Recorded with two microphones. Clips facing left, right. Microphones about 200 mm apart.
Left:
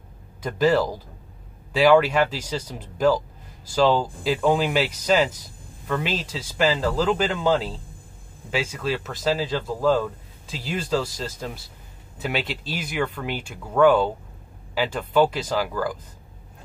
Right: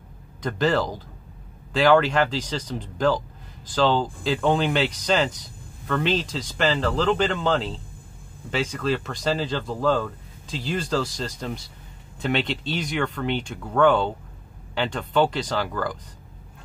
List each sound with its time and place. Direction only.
0.4 s speech: 10° left (ahead or behind)